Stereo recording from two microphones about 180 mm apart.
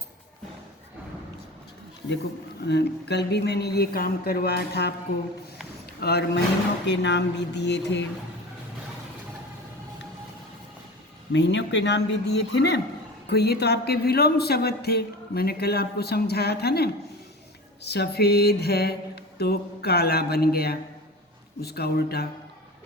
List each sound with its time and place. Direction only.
2.6 s speech: 70° left (ahead or behind)
6.0 s a man's voice: 65° left (ahead or behind)
6.8 s a man's voice: 75° left (ahead or behind)
11.3 s a man's voice: 85° left; by 22.3 s 60° left (ahead or behind)